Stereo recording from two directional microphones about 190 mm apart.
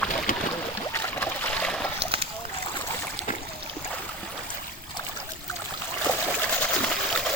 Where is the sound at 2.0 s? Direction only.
30° right (ahead or behind).